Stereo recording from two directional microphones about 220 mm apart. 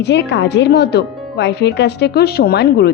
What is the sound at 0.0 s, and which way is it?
Speech, 50° left (ahead or behind).